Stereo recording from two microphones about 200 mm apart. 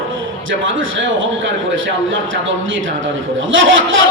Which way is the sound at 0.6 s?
70° right (ahead or behind).